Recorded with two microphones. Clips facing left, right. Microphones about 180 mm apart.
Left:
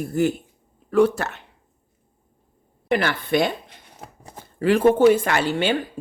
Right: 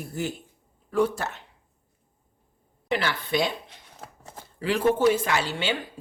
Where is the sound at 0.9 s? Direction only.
70° left (ahead or behind).